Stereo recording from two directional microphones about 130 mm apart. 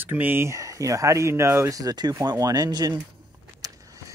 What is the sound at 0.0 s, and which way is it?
Speech, 15° right (ahead or behind).